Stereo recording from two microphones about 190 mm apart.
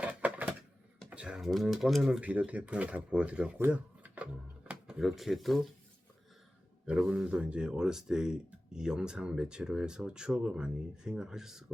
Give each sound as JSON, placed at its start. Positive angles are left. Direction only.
{"t": 0.0, "sound": "a sound", "side_deg": -10}
{"t": 1.1, "sound": "speech", "side_deg": -5}
{"t": 6.8, "sound": "speech", "side_deg": -5}